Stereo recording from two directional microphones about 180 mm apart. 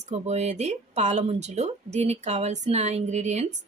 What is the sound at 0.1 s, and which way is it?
Speech, 40° right (ahead or behind).